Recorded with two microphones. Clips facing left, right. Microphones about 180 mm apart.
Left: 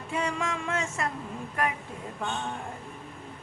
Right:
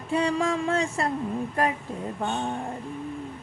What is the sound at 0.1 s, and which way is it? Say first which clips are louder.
A woman's voice: right 7 dB; 35° right (ahead or behind).